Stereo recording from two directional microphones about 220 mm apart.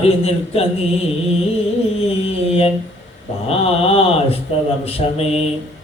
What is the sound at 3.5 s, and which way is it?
A man's voice, 25° left (ahead or behind).